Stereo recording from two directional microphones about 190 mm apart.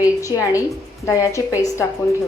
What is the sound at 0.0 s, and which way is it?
A woman's voice, 15° left (ahead or behind).